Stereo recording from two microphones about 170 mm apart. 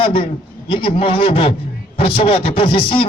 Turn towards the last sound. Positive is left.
turn(degrees=35)  # may be behind; listen again after turning